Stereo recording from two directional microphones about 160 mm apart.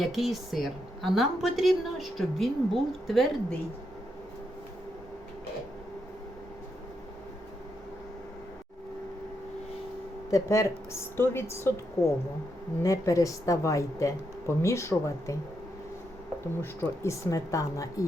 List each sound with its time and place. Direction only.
0.0 s a woman's voice: centre (ahead or behind)
10.3 s a woman's voice: 20° left (ahead or behind)
16.6 s a woman's voice: 15° left (ahead or behind)